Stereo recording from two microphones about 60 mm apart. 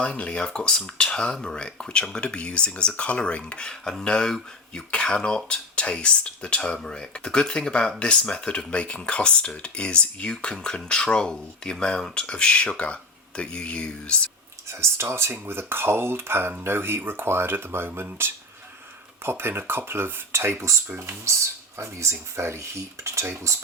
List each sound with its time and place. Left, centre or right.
0.0 s speech: centre
14.7 s speech: right